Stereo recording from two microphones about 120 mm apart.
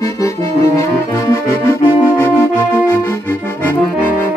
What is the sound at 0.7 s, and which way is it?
Brass instrument, 25° left (ahead or behind).